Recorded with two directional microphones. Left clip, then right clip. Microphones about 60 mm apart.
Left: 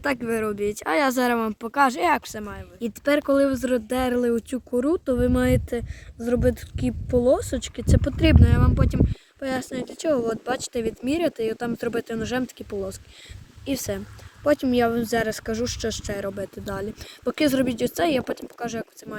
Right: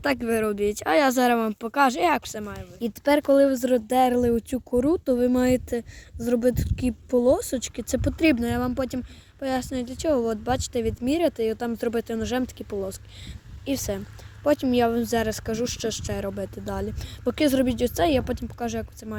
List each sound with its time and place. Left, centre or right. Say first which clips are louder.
0.0 s speech: right 1 dB; right
1.4 s speech: left 1 dB; right
3.2 s speech: right 4 dB; centre
3.6 s speech: right 3 dB; right
8.6 s speech: left 2 dB; right